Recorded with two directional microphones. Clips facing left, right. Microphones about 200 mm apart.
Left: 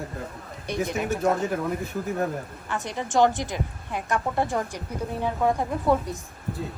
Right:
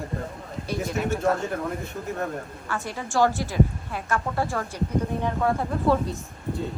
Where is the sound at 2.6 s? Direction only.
20° left (ahead or behind).